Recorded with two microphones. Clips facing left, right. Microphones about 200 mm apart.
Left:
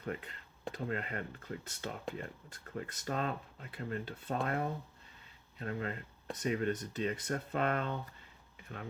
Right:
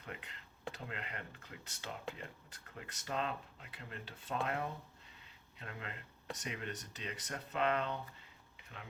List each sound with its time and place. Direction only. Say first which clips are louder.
0.0 s speech: left 9 dB; 45° left (ahead or behind)